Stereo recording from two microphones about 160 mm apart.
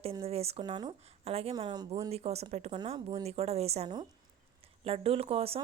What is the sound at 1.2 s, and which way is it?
Speech, 40° right (ahead or behind).